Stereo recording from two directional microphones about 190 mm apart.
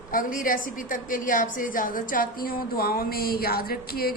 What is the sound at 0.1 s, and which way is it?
A woman's voice, 45° left (ahead or behind).